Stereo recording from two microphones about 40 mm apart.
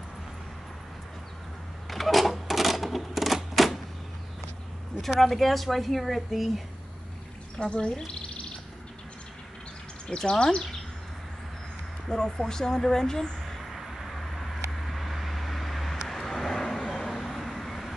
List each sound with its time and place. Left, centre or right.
1.9 s a sound: centre
3.5 s typewriter: centre
5.2 s a woman's voice: centre
7.5 s speech: left
10.0 s speech: centre
12.1 s speech: centre
13.7 s vehicle: centre